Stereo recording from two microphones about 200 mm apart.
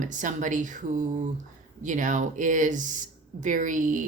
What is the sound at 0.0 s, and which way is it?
Speech, 40° right (ahead or behind).